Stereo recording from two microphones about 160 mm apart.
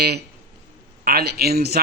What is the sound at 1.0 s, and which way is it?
Speech, 80° right.